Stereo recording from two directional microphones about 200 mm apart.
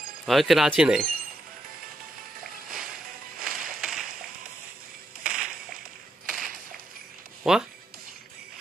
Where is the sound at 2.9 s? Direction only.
45° right (ahead or behind).